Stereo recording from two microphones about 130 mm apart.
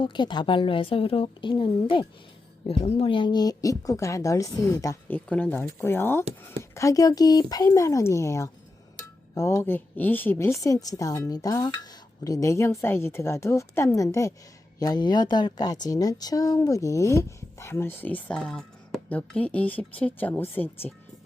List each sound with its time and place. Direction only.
0.0 s a woman's voice: 35° left (ahead or behind)
5.0 s a woman's voice: 15° left (ahead or behind)